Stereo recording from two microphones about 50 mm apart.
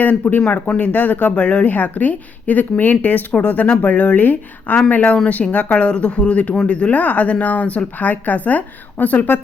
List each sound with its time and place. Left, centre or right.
0.0 s speech: left